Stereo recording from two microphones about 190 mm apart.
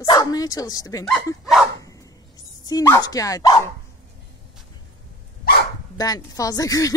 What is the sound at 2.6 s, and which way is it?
Speech, 20° left (ahead or behind).